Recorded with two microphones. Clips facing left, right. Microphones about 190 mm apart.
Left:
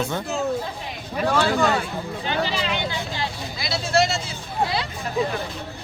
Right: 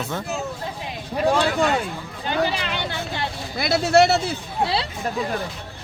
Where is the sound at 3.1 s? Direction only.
55° right (ahead or behind).